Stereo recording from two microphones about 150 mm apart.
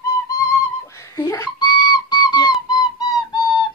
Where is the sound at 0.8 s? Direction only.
20° left (ahead or behind).